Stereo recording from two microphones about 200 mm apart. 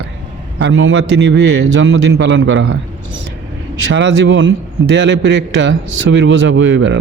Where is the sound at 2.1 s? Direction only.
80° right.